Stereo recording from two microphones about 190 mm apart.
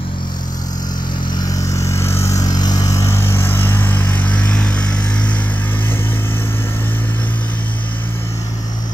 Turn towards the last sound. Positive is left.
turn(degrees=10)  # may be behind; listen again after turning